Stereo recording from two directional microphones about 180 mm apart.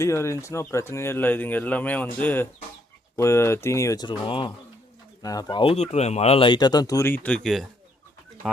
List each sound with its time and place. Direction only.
0.0 s speech: 15° left (ahead or behind)